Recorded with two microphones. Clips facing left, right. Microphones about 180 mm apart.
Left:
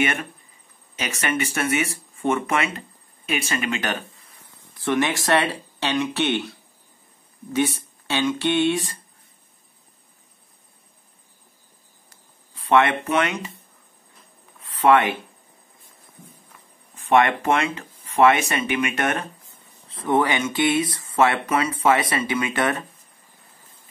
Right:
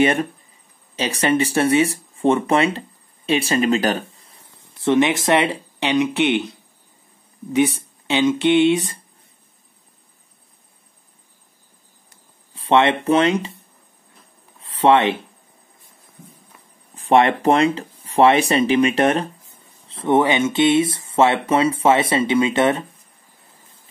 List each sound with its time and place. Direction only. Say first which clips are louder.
0.0 s speech: right 7 dB; 35° right (ahead or behind)
12.5 s speech: right 2 dB; 25° right (ahead or behind)
14.6 s a sound: right 2 dB; 30° right (ahead or behind)
16.9 s speech: right 3 dB; 35° right (ahead or behind)